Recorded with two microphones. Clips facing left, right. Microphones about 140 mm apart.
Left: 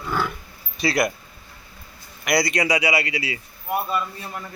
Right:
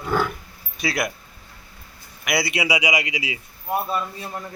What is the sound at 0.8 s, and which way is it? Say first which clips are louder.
Speech: left 4 dB; centre (ahead or behind).